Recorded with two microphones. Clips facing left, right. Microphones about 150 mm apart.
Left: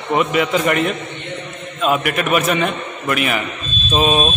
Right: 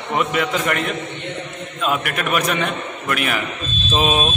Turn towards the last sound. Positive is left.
turn(degrees=-5)  # may be behind; listen again after turning